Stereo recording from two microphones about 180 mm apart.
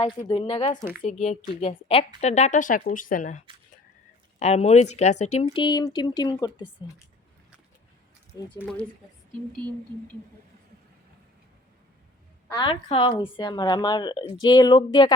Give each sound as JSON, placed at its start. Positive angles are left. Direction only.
{"t": 0.3, "sound": "a woman's voice", "side_deg": 30}
{"t": 1.0, "sound": "speech", "side_deg": 40}
{"t": 8.3, "sound": "a woman's voice", "side_deg": 20}
{"t": 12.5, "sound": "a woman's voice", "side_deg": 25}